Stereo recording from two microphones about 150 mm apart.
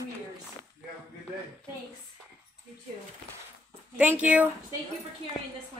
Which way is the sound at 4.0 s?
10° right (ahead or behind).